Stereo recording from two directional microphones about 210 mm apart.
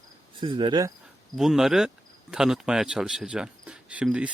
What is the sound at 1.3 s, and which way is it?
Speech, centre (ahead or behind).